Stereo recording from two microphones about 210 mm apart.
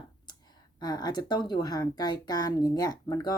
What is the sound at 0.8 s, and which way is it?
A woman's voice, 20° left (ahead or behind).